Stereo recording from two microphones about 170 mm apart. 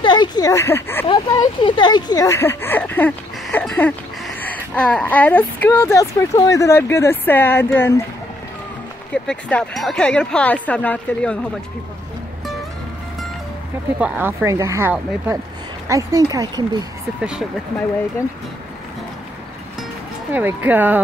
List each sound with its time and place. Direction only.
0.0 s speech: 25° left (ahead or behind)
1.0 s speech: 30° left (ahead or behind); by 7.9 s 15° left (ahead or behind)
9.1 s speech: 5° left (ahead or behind)
13.9 s speech: 10° right (ahead or behind)
17.2 s speech: 5° right (ahead or behind)
20.3 s speech: 10° right (ahead or behind)